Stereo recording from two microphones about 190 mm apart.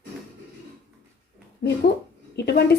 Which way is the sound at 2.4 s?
60° left (ahead or behind).